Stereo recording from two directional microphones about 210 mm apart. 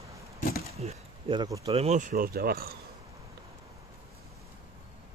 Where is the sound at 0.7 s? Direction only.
25° right (ahead or behind); by 2.8 s 45° right (ahead or behind).